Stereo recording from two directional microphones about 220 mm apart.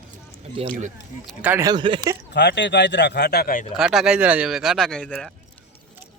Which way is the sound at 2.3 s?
50° left (ahead or behind).